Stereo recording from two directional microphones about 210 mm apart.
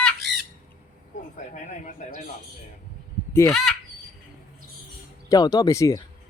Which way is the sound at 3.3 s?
15° left (ahead or behind).